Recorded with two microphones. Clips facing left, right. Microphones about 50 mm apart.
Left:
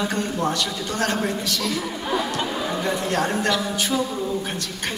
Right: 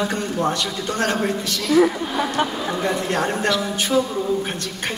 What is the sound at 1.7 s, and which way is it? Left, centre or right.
Speech, right.